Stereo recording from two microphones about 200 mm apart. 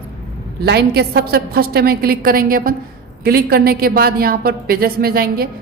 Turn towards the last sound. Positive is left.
turn(degrees=-50)  # may be behind; listen again after turning